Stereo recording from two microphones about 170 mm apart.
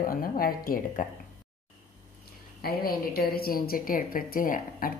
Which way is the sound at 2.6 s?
60° left (ahead or behind).